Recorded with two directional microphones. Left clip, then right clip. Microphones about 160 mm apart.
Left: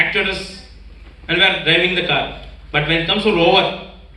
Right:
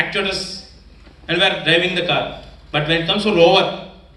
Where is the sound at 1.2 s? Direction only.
45° right (ahead or behind).